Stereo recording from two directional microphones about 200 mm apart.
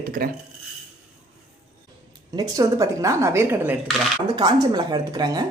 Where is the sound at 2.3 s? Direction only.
20° right (ahead or behind).